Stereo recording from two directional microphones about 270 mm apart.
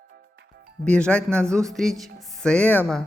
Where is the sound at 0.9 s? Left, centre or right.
Centre.